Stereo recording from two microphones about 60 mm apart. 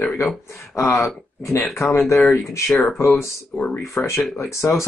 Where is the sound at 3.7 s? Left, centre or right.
Left.